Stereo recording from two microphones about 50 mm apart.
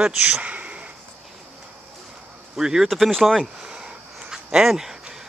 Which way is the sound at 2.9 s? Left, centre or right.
Centre.